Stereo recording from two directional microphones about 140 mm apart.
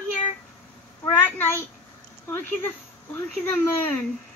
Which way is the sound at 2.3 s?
15° left (ahead or behind).